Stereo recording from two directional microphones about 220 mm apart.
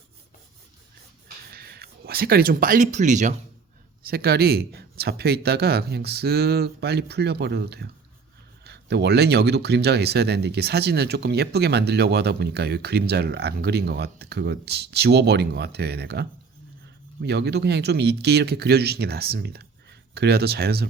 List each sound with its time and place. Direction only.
1.5 s speech: 45° right (ahead or behind)
4.0 s speech: 45° right (ahead or behind)
17.2 s speech: 50° right (ahead or behind)